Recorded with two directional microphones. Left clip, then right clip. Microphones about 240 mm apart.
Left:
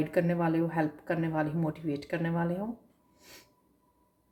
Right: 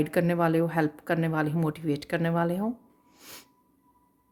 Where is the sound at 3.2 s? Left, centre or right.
Right.